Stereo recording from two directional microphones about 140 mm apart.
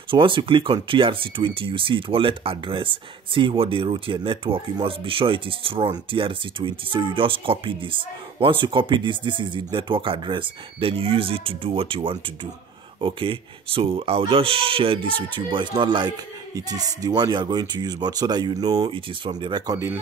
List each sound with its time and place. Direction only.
0.1 s speech: 35° right (ahead or behind)